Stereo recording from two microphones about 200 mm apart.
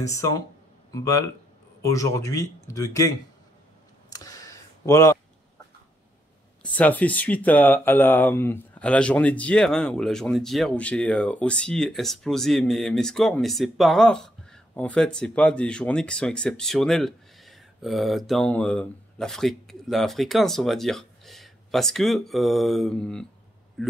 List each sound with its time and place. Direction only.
0.0 s speech: 15° left (ahead or behind)
4.1 s a sound: 15° left (ahead or behind)
6.6 s speech: 5° left (ahead or behind)